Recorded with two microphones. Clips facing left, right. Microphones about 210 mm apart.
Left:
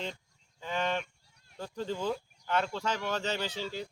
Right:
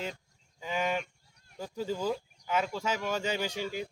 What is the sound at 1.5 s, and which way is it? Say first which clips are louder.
Speech: right 1 dB; 10° right (ahead or behind).